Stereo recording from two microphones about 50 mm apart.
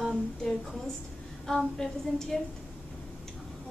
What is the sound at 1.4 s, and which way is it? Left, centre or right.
Speech, centre.